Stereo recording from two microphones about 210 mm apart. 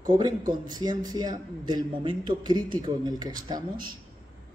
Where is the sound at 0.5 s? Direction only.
20° right (ahead or behind).